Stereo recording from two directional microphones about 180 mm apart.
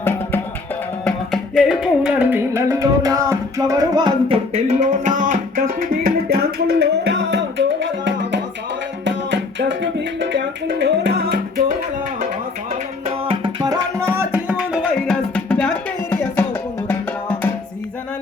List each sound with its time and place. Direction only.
0.0 s music: 10° left (ahead or behind); by 4.4 s 20° right (ahead or behind)
4.5 s music: 40° right (ahead or behind); by 8.4 s 90° right
9.0 s music: 80° right
10.8 s music: 75° right (ahead or behind)
13.1 s tabla: 30° right (ahead or behind)
13.7 s music: 15° right (ahead or behind); by 17.5 s 10° left (ahead or behind)